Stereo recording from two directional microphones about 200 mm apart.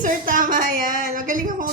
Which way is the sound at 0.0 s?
40° right (ahead or behind).